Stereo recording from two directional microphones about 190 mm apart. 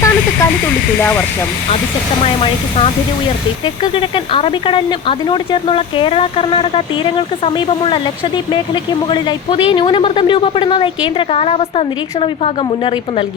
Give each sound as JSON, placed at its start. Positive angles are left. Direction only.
{"t": 0.0, "sound": "speech", "side_deg": 10}
{"t": 3.9, "sound": "speech", "side_deg": 25}